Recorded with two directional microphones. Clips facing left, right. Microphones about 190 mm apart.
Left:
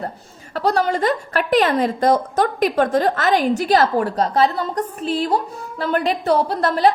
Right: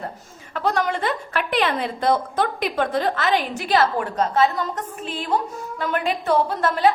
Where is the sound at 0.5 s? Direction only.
35° left (ahead or behind).